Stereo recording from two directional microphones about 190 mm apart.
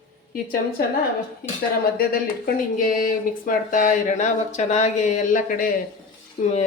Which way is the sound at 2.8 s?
45° left (ahead or behind).